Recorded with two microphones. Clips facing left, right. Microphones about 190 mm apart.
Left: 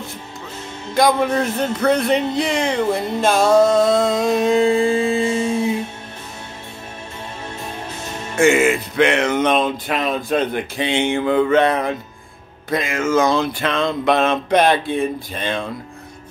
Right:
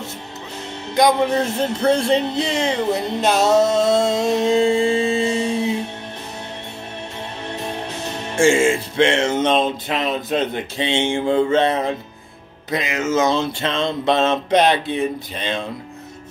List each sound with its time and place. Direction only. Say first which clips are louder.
0.9 s music: even; 20° right (ahead or behind)
8.4 s music: left 1 dB; 30° right (ahead or behind)